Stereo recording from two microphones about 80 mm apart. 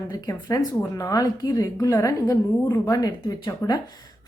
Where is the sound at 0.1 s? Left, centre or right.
Left.